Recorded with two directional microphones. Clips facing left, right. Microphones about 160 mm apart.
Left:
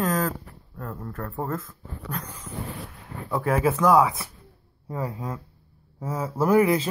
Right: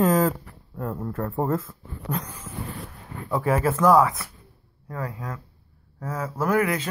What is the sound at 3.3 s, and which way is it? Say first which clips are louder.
Speech: even; centre (ahead or behind).